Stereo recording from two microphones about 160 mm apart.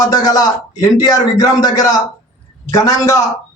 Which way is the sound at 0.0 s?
25° left (ahead or behind).